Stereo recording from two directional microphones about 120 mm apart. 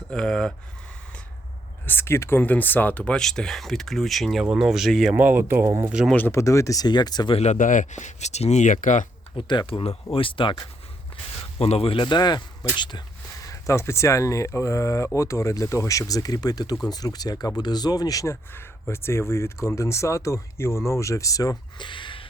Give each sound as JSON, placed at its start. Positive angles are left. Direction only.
{"t": 0.1, "sound": "speech", "side_deg": 5}
{"t": 1.9, "sound": "speech", "side_deg": 20}
{"t": 5.1, "sound": "speech", "side_deg": -15}
{"t": 6.1, "sound": "speech", "side_deg": 10}
{"t": 6.3, "sound": "speech", "side_deg": 25}
{"t": 7.3, "sound": "speech", "side_deg": 70}
{"t": 9.3, "sound": "speech", "side_deg": 45}
{"t": 11.6, "sound": "speech", "side_deg": 55}
{"t": 18.5, "sound": "speech", "side_deg": 20}